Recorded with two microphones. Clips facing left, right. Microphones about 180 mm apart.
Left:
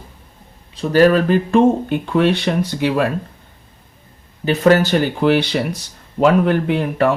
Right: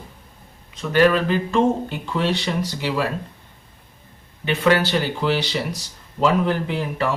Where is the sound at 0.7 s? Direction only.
40° left (ahead or behind); by 3.0 s 55° left (ahead or behind).